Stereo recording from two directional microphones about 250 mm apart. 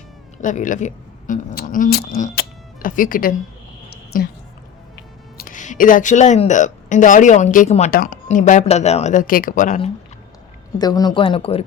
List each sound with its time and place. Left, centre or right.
0.4 s a woman's voice: left
5.4 s a woman's voice: left
10.8 s a woman's voice: centre